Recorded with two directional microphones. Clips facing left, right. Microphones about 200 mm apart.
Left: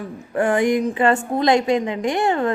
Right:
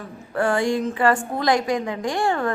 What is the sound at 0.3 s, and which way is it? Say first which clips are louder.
A woman's voice: left 3 dB; 20° left (ahead or behind).